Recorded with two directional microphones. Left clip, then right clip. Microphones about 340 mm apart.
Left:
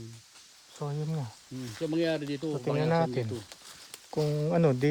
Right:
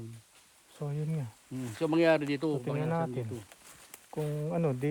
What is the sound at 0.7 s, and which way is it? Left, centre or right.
Speech, centre.